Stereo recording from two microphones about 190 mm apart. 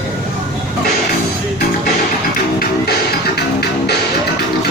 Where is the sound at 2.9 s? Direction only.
55° left (ahead or behind).